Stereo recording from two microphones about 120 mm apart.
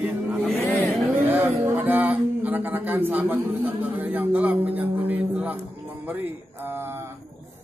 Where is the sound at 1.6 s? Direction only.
20° right (ahead or behind).